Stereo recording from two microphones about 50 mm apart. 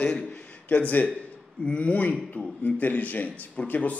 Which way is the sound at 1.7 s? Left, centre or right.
Left.